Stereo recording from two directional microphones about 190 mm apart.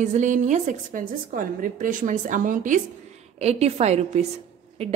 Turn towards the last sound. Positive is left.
turn(degrees=-30)  # may be behind; listen again after turning